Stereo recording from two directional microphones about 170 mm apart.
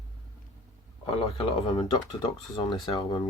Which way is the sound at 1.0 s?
30° left (ahead or behind).